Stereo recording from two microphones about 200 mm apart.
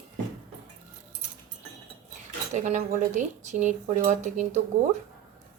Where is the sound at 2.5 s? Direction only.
35° right (ahead or behind).